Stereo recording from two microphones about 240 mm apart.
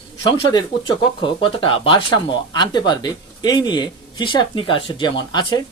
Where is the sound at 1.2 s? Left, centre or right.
Left.